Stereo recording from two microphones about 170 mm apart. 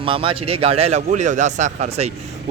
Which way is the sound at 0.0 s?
30° right (ahead or behind).